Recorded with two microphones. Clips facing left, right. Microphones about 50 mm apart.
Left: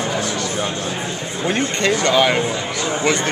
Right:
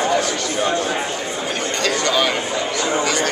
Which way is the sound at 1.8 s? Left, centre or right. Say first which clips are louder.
Left 3 dB; left.